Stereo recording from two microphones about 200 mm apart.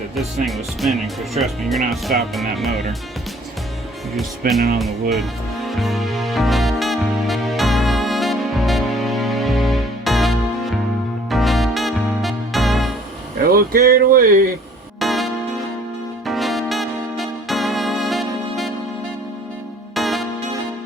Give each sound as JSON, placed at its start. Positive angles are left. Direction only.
{"t": 0.2, "sound": "speech", "side_deg": 0}
{"t": 4.4, "sound": "speech", "side_deg": -45}
{"t": 5.6, "sound": "music", "side_deg": 0}
{"t": 13.4, "sound": "speech", "side_deg": -50}
{"t": 14.9, "sound": "music", "side_deg": 0}
{"t": 20.0, "sound": "music", "side_deg": 0}